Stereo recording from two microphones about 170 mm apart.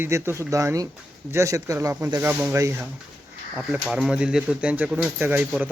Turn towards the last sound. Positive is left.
turn(degrees=-10)  # may be behind; listen again after turning